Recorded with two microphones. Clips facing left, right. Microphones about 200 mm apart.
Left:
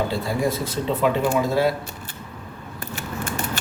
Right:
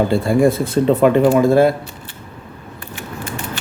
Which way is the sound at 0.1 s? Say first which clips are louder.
Right 9 dB; 55° right (ahead or behind).